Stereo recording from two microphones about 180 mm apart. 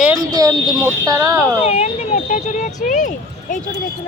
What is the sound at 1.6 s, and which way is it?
Speech, 35° left (ahead or behind).